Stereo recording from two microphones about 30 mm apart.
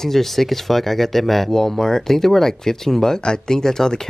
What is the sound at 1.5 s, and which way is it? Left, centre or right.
Speech, centre.